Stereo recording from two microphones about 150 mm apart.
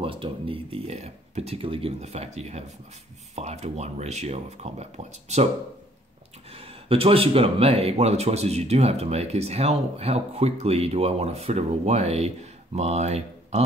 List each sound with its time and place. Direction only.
0.0 s speech: 35° right (ahead or behind)
6.5 s speech: 40° right (ahead or behind)